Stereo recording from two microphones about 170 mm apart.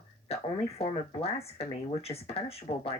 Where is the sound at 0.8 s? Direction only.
35° left (ahead or behind).